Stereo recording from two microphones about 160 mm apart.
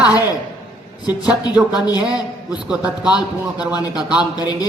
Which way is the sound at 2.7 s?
5° right (ahead or behind).